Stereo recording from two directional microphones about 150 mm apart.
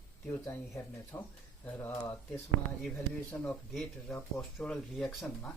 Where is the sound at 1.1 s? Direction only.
20° left (ahead or behind).